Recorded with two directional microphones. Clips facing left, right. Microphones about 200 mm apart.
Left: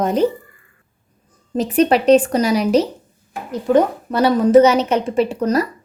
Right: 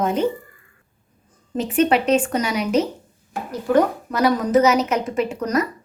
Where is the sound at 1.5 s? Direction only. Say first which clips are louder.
Left 3 dB; 35° left (ahead or behind).